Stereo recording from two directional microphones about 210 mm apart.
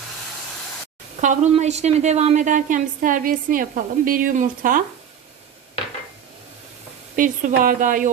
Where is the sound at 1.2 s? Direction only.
35° right (ahead or behind).